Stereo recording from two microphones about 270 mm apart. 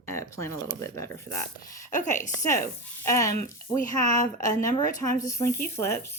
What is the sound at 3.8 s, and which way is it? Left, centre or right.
Speech, left.